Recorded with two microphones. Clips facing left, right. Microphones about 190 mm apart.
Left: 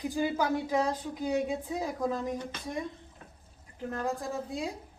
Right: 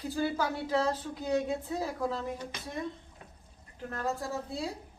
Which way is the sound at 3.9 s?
15° left (ahead or behind).